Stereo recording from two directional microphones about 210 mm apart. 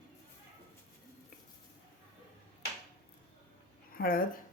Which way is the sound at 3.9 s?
45° left (ahead or behind).